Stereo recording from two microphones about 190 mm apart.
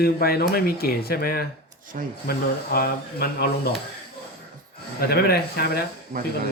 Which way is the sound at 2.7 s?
55° left (ahead or behind).